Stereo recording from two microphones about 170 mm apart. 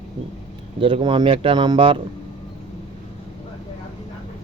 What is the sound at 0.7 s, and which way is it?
A man's voice, 30° right (ahead or behind).